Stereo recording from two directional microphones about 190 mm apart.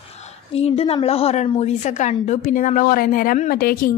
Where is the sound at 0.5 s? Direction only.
35° left (ahead or behind).